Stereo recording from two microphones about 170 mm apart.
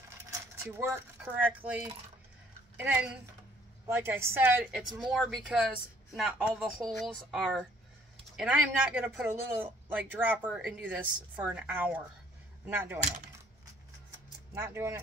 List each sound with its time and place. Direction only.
0.3 s a sound: 15° right (ahead or behind)
2.8 s speech: 10° right (ahead or behind)
5.0 s speech: centre (ahead or behind)
14.5 s speech: 15° right (ahead or behind)